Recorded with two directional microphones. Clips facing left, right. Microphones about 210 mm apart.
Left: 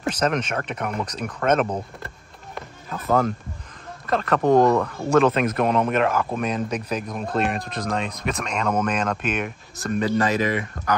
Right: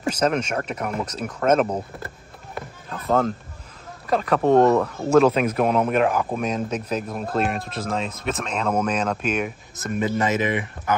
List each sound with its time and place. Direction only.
0.0 s speech: 5° right (ahead or behind)
4.0 s speech: 10° right (ahead or behind)
10.2 s speech: 20° right (ahead or behind)